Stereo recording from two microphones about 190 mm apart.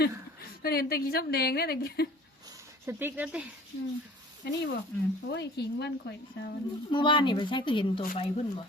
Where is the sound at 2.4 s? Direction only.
15° right (ahead or behind).